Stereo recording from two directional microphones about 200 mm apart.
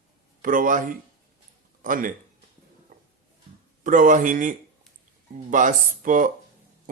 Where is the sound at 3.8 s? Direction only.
40° right (ahead or behind).